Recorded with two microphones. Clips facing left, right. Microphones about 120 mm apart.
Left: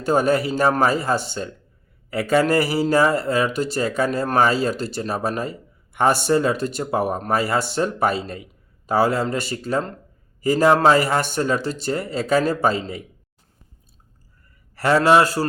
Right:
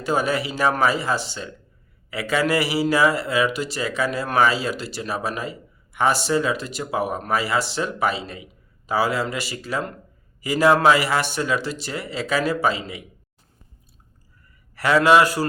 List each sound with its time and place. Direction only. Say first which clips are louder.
0.0 s speech: left 4 dB; 50° left (ahead or behind)
14.8 s a man's voice: left 1 dB; 35° left (ahead or behind)